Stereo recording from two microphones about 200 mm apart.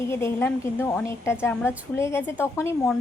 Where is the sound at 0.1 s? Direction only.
10° left (ahead or behind).